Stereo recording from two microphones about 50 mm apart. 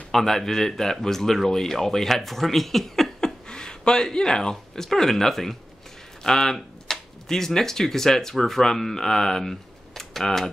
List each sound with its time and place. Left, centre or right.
0.1 s speech: centre
3.4 s speech: centre